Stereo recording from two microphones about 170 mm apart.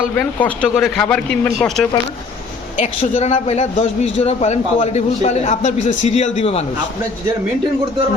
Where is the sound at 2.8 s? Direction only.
40° left (ahead or behind).